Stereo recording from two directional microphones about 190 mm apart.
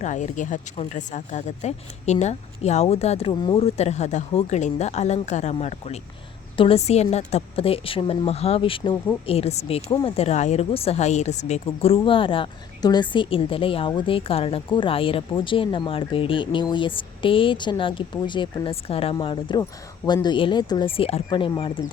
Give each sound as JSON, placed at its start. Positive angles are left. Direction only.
{"t": 0.0, "sound": "a woman's voice", "side_deg": 40}